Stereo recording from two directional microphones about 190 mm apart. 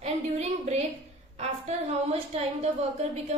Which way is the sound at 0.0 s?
35° right (ahead or behind).